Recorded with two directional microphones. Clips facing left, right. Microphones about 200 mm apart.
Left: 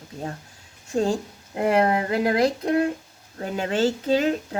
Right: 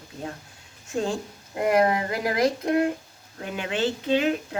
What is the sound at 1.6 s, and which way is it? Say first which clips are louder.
Speech: left 1 dB; 30° left (ahead or behind).